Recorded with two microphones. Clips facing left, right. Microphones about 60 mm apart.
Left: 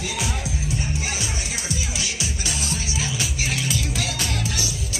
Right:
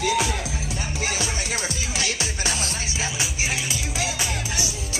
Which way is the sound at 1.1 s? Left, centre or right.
Right.